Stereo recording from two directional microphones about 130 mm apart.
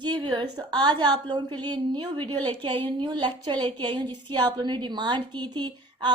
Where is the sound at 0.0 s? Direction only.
35° right (ahead or behind).